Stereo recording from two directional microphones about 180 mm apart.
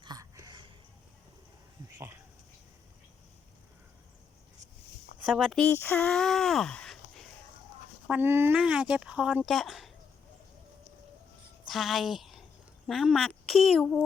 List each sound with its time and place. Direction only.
0.0 s a sound: 20° right (ahead or behind)
5.2 s speech: 5° right (ahead or behind)
5.5 s speech: 10° left (ahead or behind)
8.0 s speech: 10° right (ahead or behind)
11.7 s speech: centre (ahead or behind)